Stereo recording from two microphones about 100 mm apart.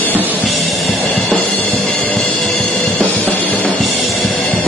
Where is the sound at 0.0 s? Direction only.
20° left (ahead or behind).